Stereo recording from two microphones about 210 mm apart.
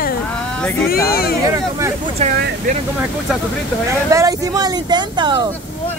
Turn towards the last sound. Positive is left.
turn(degrees=-20)  # may be behind; listen again after turning